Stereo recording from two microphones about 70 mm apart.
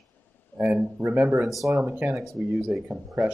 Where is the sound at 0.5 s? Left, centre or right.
Left.